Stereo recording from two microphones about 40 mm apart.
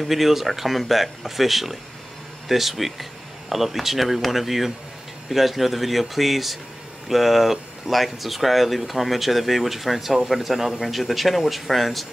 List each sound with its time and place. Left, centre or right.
0.0 s speech: centre